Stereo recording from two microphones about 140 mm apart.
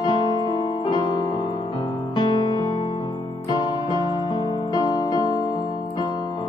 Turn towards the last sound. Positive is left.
turn(degrees=30)  # may be behind; listen again after turning